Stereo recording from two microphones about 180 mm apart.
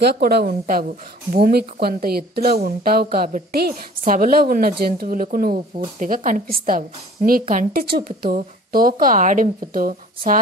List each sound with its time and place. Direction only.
0.0 s a woman's voice: 65° right (ahead or behind)